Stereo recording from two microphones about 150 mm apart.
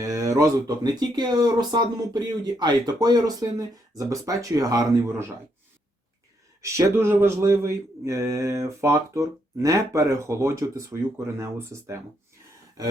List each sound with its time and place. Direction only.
0.0 s speech: 20° right (ahead or behind)
6.6 s speech: 20° right (ahead or behind)